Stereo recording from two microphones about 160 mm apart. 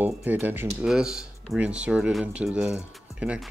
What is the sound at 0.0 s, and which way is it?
Speech, 10° right (ahead or behind).